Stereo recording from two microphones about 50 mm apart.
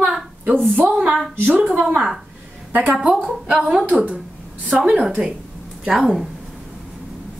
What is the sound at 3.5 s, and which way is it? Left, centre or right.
A woman's voice, right.